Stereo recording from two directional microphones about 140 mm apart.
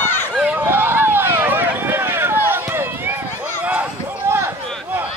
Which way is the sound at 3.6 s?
10° right (ahead or behind).